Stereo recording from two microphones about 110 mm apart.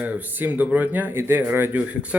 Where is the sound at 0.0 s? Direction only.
15° right (ahead or behind).